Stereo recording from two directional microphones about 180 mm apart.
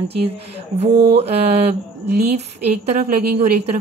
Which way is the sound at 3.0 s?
55° right (ahead or behind).